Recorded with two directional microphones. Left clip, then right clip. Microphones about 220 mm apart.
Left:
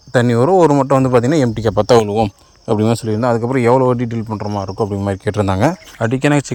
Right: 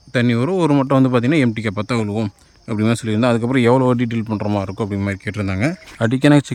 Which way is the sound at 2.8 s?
Centre (ahead or behind).